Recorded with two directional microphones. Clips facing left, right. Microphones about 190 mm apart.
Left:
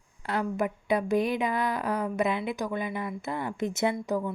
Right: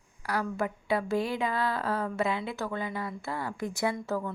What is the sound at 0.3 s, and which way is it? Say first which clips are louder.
A woman's voice: left 2 dB; 20° left (ahead or behind).